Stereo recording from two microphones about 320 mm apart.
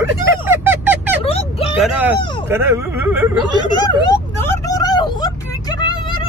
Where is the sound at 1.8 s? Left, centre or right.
Centre.